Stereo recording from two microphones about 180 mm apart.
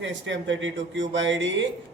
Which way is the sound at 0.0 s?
90° right.